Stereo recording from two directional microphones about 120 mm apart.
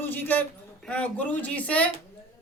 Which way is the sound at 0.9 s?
10° left (ahead or behind).